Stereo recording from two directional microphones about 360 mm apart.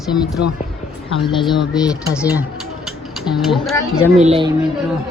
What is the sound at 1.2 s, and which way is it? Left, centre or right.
Speech, centre.